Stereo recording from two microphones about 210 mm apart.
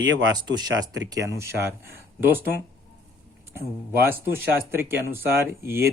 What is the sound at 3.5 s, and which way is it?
Speech, 10° right (ahead or behind).